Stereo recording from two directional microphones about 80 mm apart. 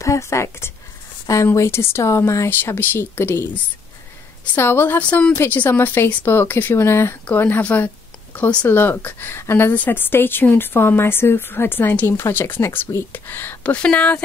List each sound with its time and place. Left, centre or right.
0.0 s speech: left
4.6 s a woman's voice: left
5.0 s speech: centre
5.4 s a woman's voice: left
8.6 s a woman's voice: left